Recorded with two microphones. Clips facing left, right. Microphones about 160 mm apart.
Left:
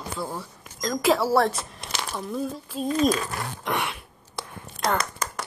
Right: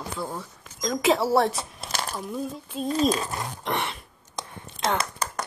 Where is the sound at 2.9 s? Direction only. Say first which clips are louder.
Left 1 dB; 30° right (ahead or behind).